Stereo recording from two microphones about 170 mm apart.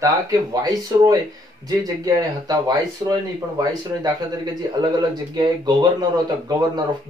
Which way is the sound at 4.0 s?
25° right (ahead or behind).